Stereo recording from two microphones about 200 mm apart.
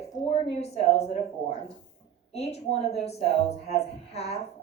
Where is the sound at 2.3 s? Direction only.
30° left (ahead or behind).